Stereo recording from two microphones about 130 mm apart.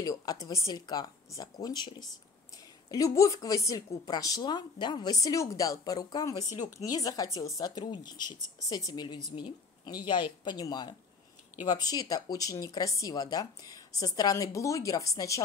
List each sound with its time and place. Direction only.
0.0 s a woman's voice: 30° left (ahead or behind)